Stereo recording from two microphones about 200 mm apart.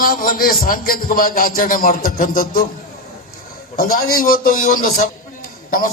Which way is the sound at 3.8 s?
45° left (ahead or behind).